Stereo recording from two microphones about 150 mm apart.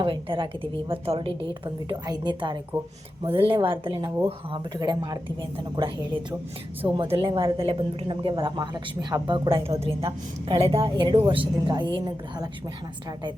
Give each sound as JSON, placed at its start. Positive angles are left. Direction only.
{"t": 0.0, "sound": "a woman's voice", "side_deg": -35}